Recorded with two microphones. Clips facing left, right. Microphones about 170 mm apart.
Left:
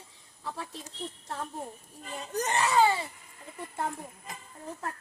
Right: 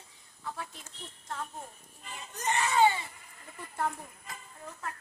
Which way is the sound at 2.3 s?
35° left (ahead or behind).